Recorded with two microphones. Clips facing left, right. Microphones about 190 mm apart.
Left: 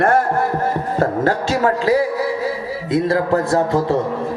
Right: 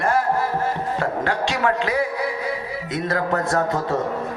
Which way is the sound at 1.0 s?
40° left (ahead or behind).